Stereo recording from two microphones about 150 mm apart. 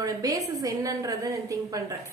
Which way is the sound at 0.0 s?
25° right (ahead or behind).